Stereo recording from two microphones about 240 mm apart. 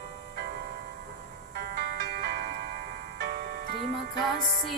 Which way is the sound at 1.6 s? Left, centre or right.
Right.